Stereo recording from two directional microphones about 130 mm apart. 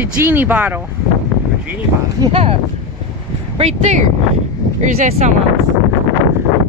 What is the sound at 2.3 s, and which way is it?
Speech, 50° right (ahead or behind).